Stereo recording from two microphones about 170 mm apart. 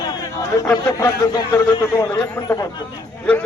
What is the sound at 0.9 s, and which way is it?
Speech, 20° left (ahead or behind).